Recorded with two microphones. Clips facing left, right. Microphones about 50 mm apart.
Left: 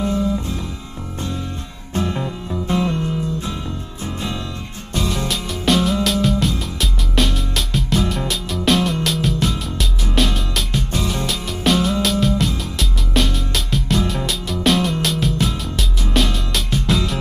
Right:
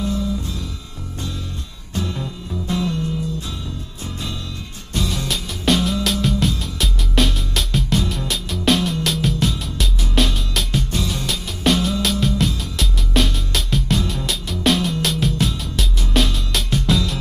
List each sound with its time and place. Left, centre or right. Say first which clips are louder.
0.0 s music: left 3 dB; left
2.0 s music: left 4 dB; left
5.3 s music: even; centre